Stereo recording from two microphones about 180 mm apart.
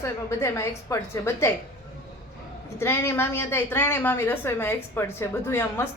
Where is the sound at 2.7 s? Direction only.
15° left (ahead or behind).